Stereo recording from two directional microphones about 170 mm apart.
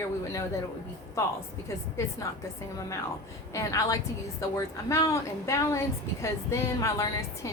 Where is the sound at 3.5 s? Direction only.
20° left (ahead or behind).